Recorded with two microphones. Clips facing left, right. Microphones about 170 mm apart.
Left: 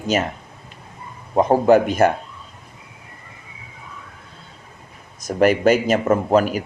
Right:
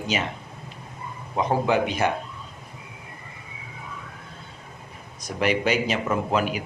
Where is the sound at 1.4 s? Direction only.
45° left (ahead or behind).